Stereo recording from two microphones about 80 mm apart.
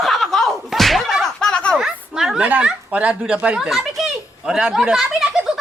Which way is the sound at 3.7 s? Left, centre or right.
Centre.